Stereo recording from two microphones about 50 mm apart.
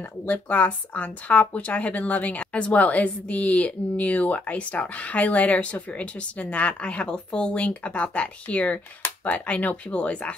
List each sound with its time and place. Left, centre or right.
0.2 s speech: left